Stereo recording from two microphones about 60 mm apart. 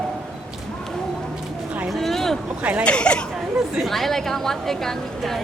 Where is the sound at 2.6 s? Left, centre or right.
Right.